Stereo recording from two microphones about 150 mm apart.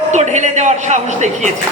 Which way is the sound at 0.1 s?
50° right (ahead or behind).